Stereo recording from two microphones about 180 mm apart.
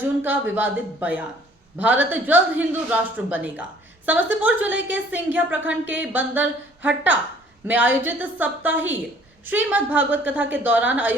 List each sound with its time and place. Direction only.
0.2 s speech: 10° right (ahead or behind)